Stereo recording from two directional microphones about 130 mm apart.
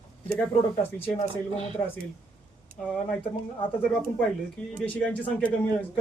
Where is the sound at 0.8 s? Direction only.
15° left (ahead or behind).